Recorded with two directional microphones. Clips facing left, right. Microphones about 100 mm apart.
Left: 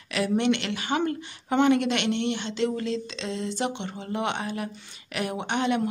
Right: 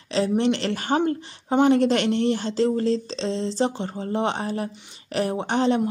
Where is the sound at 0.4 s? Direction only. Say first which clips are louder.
Right 3 dB; 35° right (ahead or behind).